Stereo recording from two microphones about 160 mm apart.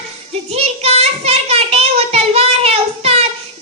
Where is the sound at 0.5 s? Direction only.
40° right (ahead or behind).